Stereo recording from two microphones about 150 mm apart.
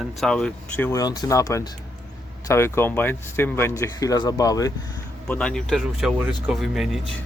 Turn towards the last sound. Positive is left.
turn(degrees=0)  # may be behind; listen again after turning